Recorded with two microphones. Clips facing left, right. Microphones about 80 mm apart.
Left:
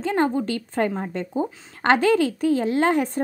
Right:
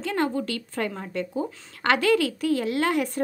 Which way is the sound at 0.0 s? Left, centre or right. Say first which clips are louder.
Left 4 dB; left.